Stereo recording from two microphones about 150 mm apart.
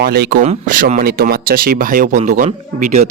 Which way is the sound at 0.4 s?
50° right (ahead or behind).